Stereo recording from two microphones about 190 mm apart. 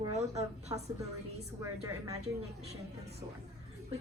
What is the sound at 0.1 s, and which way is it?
Speech, 35° right (ahead or behind).